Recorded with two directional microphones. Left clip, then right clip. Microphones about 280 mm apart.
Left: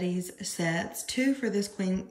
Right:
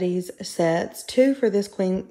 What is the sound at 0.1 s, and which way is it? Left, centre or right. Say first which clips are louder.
Speech: right 8 dB; centre.